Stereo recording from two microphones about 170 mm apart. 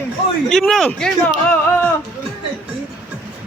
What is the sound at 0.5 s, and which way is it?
A man's voice, centre (ahead or behind).